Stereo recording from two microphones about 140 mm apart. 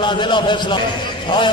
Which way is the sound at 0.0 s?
35° left (ahead or behind).